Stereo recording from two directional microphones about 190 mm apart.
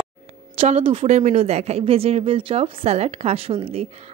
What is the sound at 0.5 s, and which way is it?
Speech, 35° right (ahead or behind).